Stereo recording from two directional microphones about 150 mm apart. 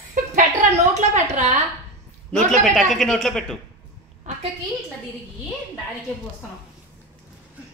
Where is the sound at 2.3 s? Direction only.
5° left (ahead or behind).